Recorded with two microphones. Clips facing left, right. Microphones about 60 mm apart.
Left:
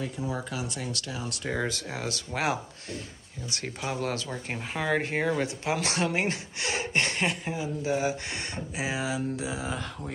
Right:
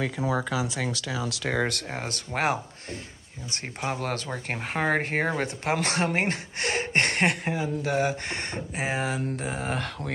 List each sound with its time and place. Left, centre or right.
0.2 s speech: right
0.8 s speech: right
1.5 s speech: right
1.9 s speech: right